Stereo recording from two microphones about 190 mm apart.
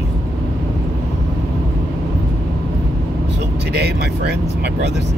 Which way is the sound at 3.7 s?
60° right (ahead or behind).